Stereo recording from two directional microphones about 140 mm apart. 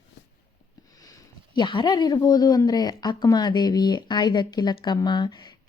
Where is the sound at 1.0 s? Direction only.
30° left (ahead or behind).